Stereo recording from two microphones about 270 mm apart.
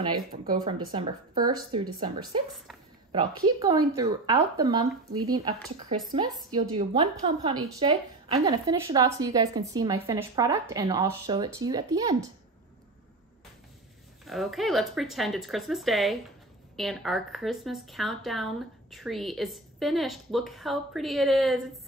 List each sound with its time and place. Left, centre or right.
0.5 s a woman's voice: centre
14.2 s a woman's voice: centre